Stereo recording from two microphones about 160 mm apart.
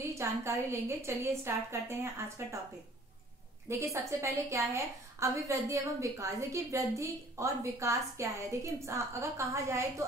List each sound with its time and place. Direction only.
0.1 s a woman's voice: 15° right (ahead or behind)
3.6 s a woman's voice: 20° right (ahead or behind)